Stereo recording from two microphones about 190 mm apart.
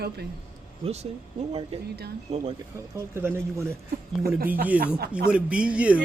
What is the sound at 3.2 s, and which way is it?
Speech, 15° right (ahead or behind).